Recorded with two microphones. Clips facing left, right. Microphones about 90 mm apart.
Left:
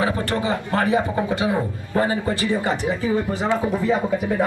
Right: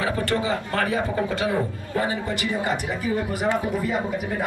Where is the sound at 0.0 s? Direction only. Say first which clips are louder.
Left 2 dB; 20° left (ahead or behind).